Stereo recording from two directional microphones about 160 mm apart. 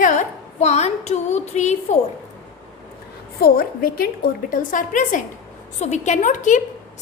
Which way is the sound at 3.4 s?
70° left (ahead or behind).